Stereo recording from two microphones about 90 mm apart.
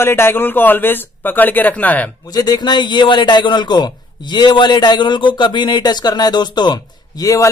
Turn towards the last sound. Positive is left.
turn(degrees=40)  # may be behind; listen again after turning